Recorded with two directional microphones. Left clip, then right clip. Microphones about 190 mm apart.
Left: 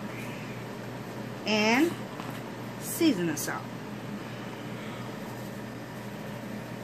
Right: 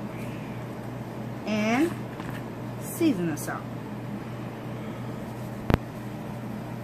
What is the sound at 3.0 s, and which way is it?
Speech, 45° left (ahead or behind).